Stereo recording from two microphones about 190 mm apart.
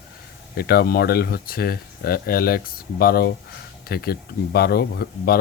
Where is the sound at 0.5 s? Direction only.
55° left (ahead or behind).